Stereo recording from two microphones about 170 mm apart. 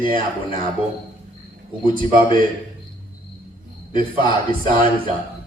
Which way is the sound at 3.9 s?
30° left (ahead or behind).